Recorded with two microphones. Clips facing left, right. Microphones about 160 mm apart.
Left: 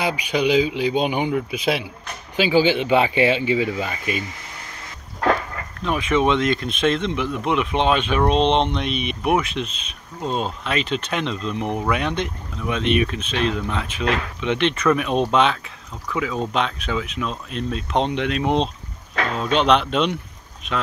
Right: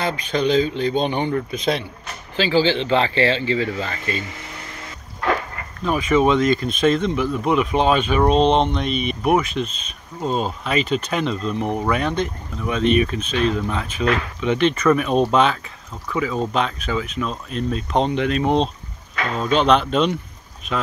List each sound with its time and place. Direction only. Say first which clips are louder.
0.0 s speech: even; 10° left (ahead or behind)
5.8 s speech: right 2 dB; centre (ahead or behind)